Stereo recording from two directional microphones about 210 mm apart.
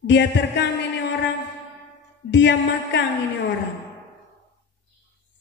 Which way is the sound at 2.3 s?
60° left (ahead or behind).